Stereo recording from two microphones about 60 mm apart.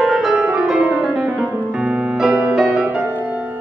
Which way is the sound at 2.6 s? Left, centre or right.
Right.